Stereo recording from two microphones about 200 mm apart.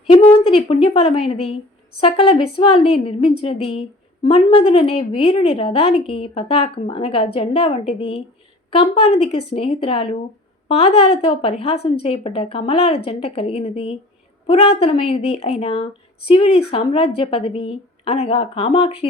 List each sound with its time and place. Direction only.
0.1 s a woman's voice: 25° left (ahead or behind)